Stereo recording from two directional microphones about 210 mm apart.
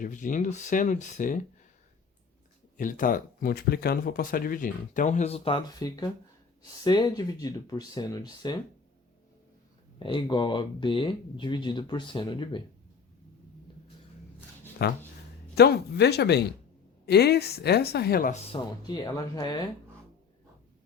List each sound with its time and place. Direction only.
0.0 s speech: 40° left (ahead or behind)
2.7 s speech: 40° left (ahead or behind); by 8.5 s 20° left (ahead or behind)
10.0 s speech: 20° left (ahead or behind)
14.8 s a woman's voice: 50° left (ahead or behind)
18.5 s speech: 20° left (ahead or behind)